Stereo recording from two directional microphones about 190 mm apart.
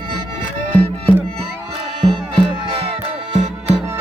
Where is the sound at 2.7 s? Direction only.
30° right (ahead or behind).